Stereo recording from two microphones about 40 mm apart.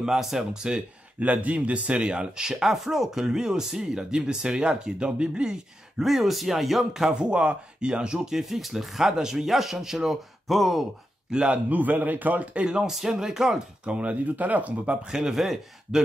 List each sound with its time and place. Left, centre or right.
0.0 s speech: centre
0.5 s speech: centre
1.2 s speech: right
1.9 s speech: right
2.4 s speech: centre
6.0 s speech: centre
7.1 s speech: right
8.4 s speech: centre
11.3 s speech: right
11.7 s a man's voice: right
12.6 s speech: right
13.8 s speech: right
15.0 s speech: centre